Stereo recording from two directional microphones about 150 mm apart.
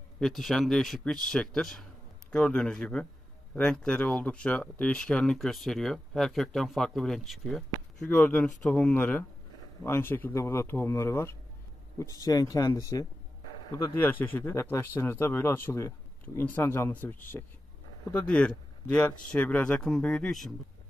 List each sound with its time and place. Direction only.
0.2 s speech: centre (ahead or behind)